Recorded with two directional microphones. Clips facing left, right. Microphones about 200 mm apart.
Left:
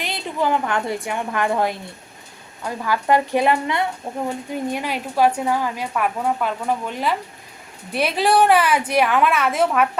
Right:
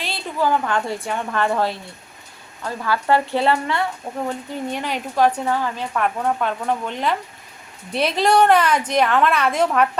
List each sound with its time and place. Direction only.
0.0 s a woman's voice: 20° left (ahead or behind)